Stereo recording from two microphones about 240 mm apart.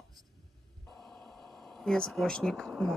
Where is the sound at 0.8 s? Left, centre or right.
Centre.